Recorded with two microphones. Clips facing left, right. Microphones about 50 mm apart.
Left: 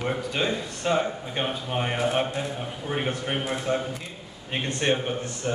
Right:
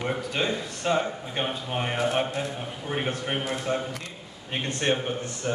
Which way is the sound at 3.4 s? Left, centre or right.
Centre.